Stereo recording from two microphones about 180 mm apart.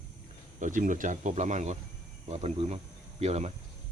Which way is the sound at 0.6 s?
45° right (ahead or behind).